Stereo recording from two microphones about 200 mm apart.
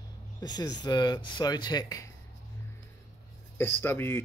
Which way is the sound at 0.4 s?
20° left (ahead or behind).